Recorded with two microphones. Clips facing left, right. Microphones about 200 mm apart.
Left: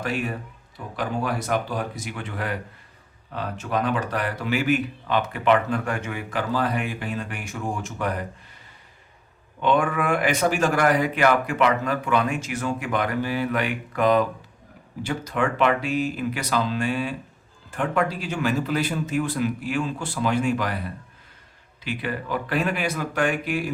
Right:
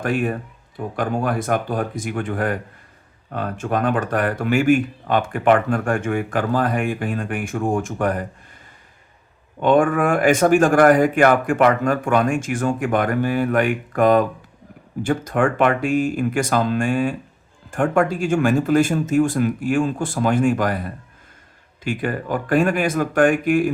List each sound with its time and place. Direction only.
0.0 s speech: 50° right (ahead or behind)
9.6 s speech: 45° right (ahead or behind)